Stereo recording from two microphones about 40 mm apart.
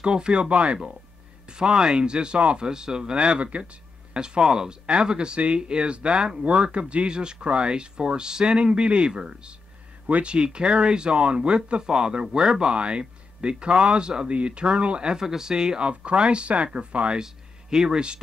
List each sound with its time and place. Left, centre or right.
0.0 s speech: right
1.6 s speech: centre
15.1 s speech: centre; by 17.2 s right
17.2 s speech: centre